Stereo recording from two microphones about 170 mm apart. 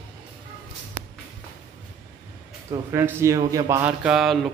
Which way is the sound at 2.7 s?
15° right (ahead or behind).